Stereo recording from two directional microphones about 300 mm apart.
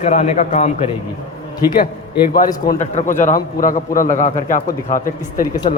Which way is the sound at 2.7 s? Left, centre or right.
Left.